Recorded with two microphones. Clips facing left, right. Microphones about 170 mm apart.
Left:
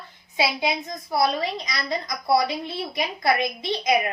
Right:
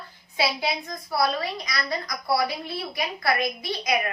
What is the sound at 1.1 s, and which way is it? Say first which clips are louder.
A woman's voice: left 2 dB; 20° left (ahead or behind).